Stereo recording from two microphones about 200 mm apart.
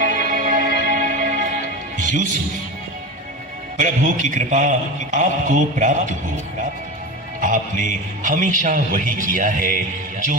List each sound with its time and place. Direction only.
0.0 s music: 40° right (ahead or behind)
3.8 s a man's voice: 40° right (ahead or behind)
7.4 s a man's voice: 40° right (ahead or behind)